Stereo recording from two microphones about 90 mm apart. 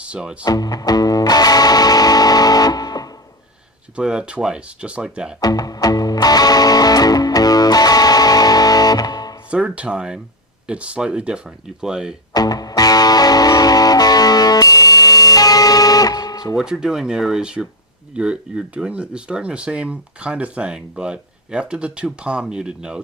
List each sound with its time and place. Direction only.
0.0 s speech: 10° right (ahead or behind)
0.4 s music: 45° left (ahead or behind)
3.9 s speech: 10° right (ahead or behind)
5.4 s music: 45° left (ahead or behind)
9.5 s speech: 15° right (ahead or behind)
12.3 s music: 45° left (ahead or behind)
16.6 s speech: 5° right (ahead or behind)